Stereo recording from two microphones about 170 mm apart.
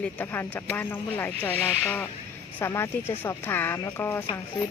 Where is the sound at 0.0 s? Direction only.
10° left (ahead or behind).